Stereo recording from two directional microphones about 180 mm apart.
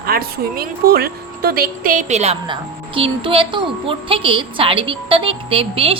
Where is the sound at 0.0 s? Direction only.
55° right (ahead or behind).